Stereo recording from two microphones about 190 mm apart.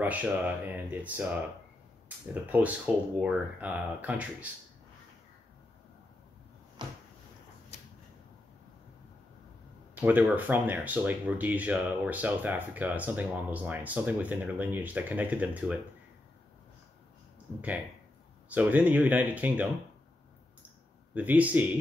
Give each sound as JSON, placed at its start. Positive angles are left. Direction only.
{"t": 0.0, "sound": "speech", "side_deg": -10}
{"t": 9.9, "sound": "speech", "side_deg": -10}
{"t": 18.5, "sound": "speech", "side_deg": -5}
{"t": 21.1, "sound": "speech", "side_deg": -10}